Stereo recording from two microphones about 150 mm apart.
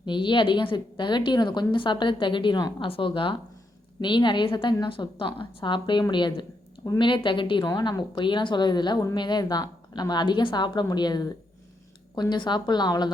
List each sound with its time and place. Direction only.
0.0 s a woman's voice: 30° left (ahead or behind)